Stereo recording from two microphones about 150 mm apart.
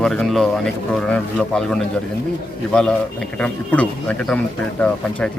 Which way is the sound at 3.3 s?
10° left (ahead or behind).